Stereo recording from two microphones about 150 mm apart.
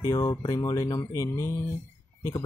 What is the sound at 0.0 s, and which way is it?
Speech, 25° left (ahead or behind).